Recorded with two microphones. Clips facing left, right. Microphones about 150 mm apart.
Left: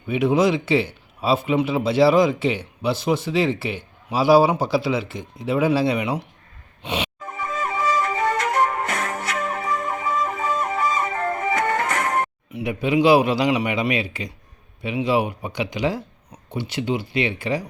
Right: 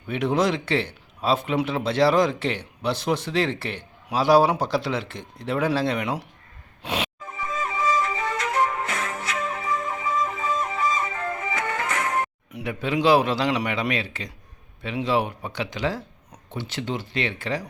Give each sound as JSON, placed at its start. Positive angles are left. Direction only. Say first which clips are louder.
{"t": 0.1, "sound": "a man's voice", "louder": "left 4 dB", "side_deg": 5}
{"t": 6.8, "sound": "music", "louder": "left 1 dB", "side_deg": 0}
{"t": 7.2, "sound": "music", "louder": "left 2 dB", "side_deg": 65}
{"t": 12.6, "sound": "a man's voice", "louder": "left 4 dB", "side_deg": 10}